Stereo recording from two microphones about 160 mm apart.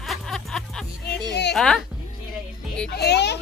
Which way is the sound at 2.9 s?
90° left.